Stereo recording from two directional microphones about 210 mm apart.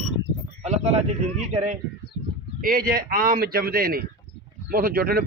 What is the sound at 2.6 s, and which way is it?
Speech, 45° right (ahead or behind).